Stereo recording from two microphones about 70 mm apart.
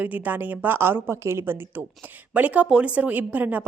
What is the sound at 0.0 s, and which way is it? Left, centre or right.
Speech, right.